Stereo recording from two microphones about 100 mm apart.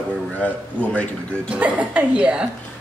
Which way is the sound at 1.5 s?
10° right (ahead or behind).